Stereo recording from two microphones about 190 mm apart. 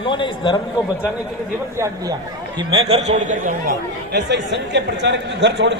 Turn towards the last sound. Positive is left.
turn(degrees=-65)  # may be behind; listen again after turning